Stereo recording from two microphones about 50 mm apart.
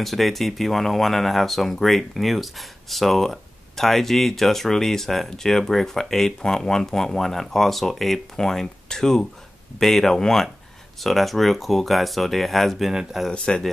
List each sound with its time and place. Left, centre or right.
0.0 s speech: centre
13.3 s speech: centre